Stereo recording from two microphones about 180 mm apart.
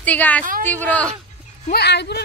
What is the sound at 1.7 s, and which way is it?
Speech, 65° left (ahead or behind).